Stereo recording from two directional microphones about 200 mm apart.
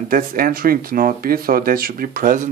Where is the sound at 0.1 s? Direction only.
45° right (ahead or behind).